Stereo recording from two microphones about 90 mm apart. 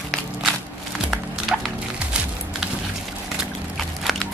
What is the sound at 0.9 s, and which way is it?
Music, 10° right (ahead or behind).